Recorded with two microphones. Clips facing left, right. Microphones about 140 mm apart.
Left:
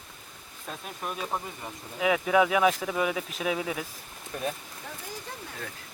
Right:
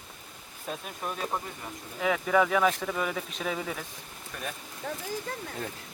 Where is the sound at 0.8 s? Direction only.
5° left (ahead or behind).